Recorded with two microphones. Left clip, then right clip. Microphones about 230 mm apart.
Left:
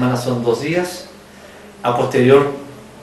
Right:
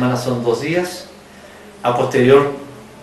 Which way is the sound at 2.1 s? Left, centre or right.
Centre.